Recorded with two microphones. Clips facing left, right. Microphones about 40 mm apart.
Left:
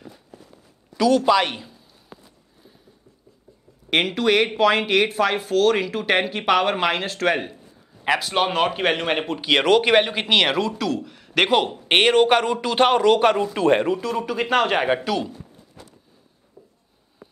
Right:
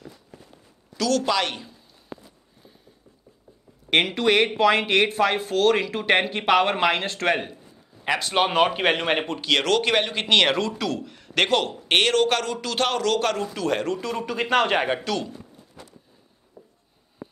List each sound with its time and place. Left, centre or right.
0.9 s speech: centre
3.9 s speech: centre
9.4 s speech: centre
14.0 s speech: centre
16.6 s a sound: centre